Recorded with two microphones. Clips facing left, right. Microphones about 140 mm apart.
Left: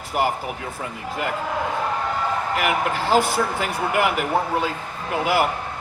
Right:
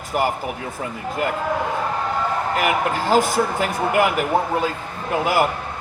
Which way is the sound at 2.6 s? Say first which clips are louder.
Right 2 dB; 45° right (ahead or behind).